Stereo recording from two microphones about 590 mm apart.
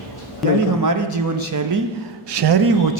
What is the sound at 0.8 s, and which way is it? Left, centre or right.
A man's voice, right.